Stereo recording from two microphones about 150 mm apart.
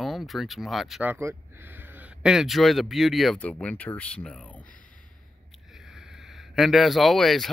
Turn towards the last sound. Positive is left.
turn(degrees=0)  # may be behind; listen again after turning